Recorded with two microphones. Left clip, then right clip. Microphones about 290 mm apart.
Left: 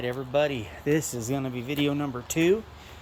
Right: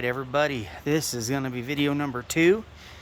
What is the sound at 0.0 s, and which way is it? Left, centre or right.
Speech, centre.